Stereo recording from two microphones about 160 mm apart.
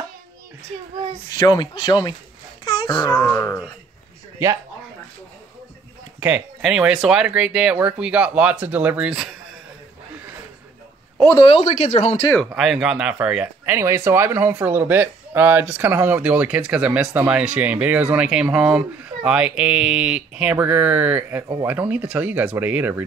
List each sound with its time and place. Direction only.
1.3 s speech: 25° left (ahead or behind)
2.6 s wail: 25° left (ahead or behind)
3.1 s speech: 15° left (ahead or behind)
6.1 s speech: 10° right (ahead or behind)
11.3 s speech: 35° left (ahead or behind)
11.7 s speech: 45° left (ahead or behind)
12.4 s speech: centre (ahead or behind)